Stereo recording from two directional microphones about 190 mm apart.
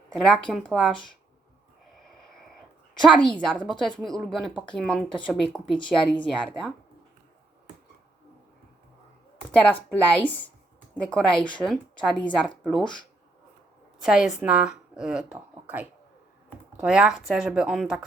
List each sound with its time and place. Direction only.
0.1 s speech: 5° left (ahead or behind)
3.0 s speech: 5° left (ahead or behind)
9.9 s speech: 10° left (ahead or behind)
14.0 s a woman's voice: centre (ahead or behind)